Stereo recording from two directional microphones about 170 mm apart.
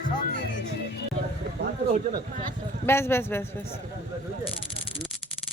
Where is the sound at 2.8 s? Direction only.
15° left (ahead or behind).